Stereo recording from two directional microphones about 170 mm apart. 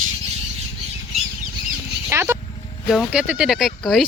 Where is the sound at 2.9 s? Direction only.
5° right (ahead or behind).